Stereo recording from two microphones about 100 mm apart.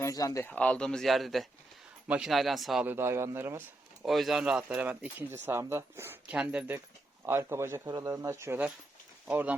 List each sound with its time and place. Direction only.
0.0 s speech: 35° left (ahead or behind)
0.4 s speech: 15° left (ahead or behind)
2.0 s speech: 10° right (ahead or behind)
2.8 s speech: 25° right (ahead or behind)
4.0 s speech: centre (ahead or behind); by 6.1 s 25° right (ahead or behind)
6.2 s speech: 10° right (ahead or behind)
7.3 s speech: 25° right (ahead or behind)
9.2 s speech: 15° right (ahead or behind)